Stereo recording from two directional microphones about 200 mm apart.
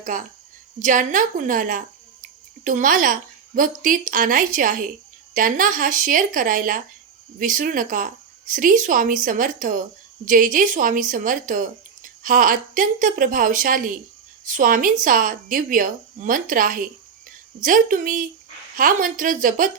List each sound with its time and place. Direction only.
0.0 s a woman's voice: 40° right (ahead or behind)